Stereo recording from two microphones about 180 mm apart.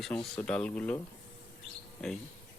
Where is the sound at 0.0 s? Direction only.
5° left (ahead or behind).